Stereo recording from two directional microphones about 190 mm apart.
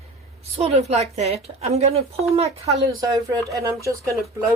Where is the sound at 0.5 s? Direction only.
35° right (ahead or behind).